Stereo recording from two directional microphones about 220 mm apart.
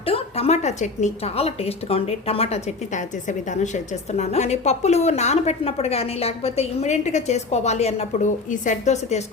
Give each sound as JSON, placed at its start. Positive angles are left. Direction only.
{"t": 0.0, "sound": "a woman's voice", "side_deg": 25}